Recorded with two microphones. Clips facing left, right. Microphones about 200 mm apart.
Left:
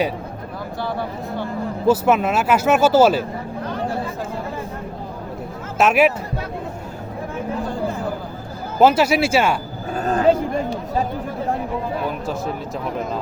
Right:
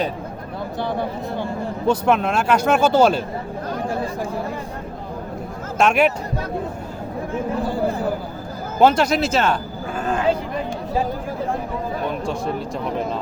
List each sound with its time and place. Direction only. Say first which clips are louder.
0.8 s speech: right 1 dB; 20° right (ahead or behind)
1.9 s speech: left 2 dB; 5° left (ahead or behind)
5.7 s speech: left 1 dB; 5° left (ahead or behind)
8.8 s speech: left 1 dB; 5° left (ahead or behind)
9.9 s a sound: left 4 dB; 40° left (ahead or behind)
12.0 s a sound: right 1 dB; 5° left (ahead or behind)